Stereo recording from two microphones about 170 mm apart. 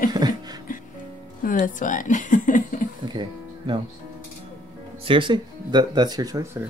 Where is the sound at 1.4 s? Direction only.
55° left (ahead or behind).